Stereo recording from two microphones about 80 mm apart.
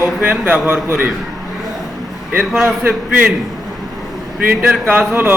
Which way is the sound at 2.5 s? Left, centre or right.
Centre.